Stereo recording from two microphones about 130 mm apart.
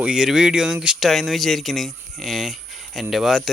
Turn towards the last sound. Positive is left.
turn(degrees=-5)  # may be behind; listen again after turning